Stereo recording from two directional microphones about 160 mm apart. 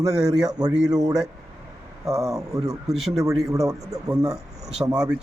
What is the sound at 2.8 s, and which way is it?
Speech, centre (ahead or behind).